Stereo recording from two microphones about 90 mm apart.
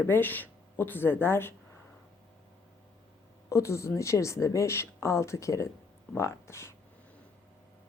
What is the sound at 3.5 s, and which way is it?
Speech, 35° left (ahead or behind).